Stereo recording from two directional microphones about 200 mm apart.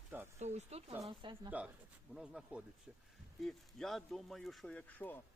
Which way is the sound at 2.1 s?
Centre (ahead or behind).